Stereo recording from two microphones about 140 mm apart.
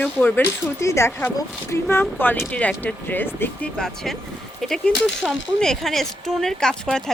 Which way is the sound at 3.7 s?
5° left (ahead or behind).